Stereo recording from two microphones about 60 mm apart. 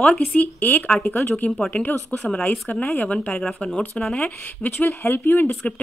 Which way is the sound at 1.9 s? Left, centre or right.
Left.